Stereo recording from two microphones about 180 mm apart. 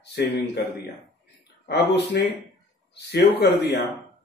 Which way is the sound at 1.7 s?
65° left (ahead or behind).